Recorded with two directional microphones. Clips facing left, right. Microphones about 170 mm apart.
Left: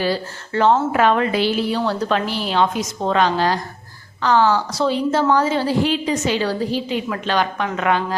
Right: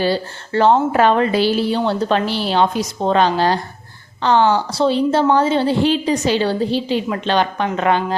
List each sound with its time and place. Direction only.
0.0 s a woman's voice: 30° right (ahead or behind)